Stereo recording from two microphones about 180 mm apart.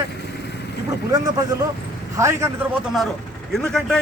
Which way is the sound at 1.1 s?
20° right (ahead or behind).